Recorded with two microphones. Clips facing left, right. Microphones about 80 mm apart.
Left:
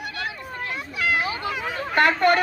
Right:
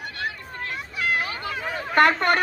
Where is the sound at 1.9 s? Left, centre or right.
Right.